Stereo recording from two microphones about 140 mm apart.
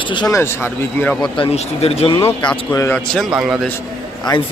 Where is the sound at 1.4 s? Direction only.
45° left (ahead or behind).